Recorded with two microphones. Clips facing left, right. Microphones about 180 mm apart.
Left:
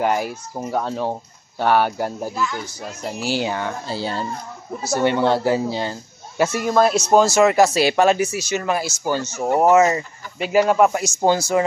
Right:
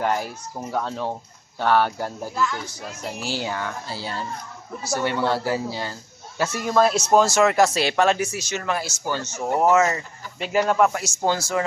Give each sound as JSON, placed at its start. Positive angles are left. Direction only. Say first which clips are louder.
{"t": 0.0, "sound": "a man's voice", "louder": "left 4 dB", "side_deg": 10}